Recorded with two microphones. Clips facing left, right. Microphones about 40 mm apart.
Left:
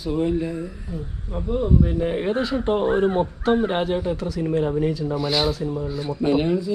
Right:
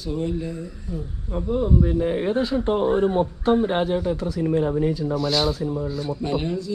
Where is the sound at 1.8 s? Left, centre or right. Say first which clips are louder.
Even; left.